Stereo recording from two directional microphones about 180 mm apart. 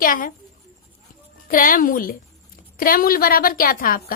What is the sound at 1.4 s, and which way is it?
A woman's voice, 50° left (ahead or behind).